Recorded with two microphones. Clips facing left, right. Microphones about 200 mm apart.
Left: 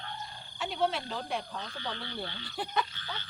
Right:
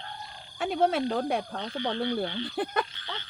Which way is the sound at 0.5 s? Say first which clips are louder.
Right 6 dB; 55° right (ahead or behind).